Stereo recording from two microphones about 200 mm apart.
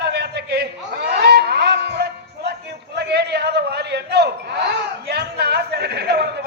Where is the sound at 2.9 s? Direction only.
55° right (ahead or behind).